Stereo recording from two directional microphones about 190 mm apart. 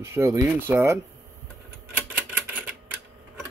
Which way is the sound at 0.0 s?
15° right (ahead or behind).